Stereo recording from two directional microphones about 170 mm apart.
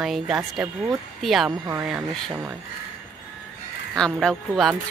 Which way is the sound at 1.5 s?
20° right (ahead or behind).